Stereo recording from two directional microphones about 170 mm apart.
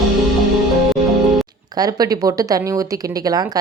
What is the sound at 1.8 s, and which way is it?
Speech, 20° right (ahead or behind).